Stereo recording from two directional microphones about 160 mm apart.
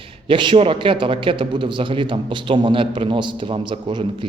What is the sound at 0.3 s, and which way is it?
A man's voice, 30° right (ahead or behind).